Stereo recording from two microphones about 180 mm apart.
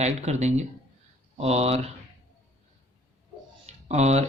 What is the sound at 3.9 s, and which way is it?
Speech, 40° right (ahead or behind).